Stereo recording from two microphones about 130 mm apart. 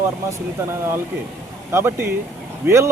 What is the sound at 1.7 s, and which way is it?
Speech, 20° right (ahead or behind).